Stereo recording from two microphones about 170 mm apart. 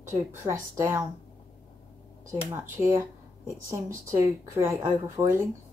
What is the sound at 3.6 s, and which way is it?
A woman's voice, 15° right (ahead or behind).